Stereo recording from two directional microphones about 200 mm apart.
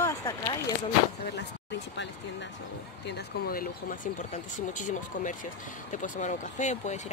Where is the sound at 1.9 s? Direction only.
65° left (ahead or behind).